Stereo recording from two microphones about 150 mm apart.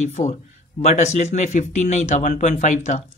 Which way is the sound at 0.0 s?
50° left (ahead or behind).